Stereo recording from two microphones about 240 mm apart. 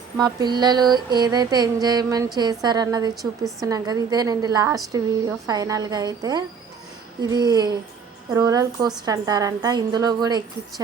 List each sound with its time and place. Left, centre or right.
0.2 s mantra: centre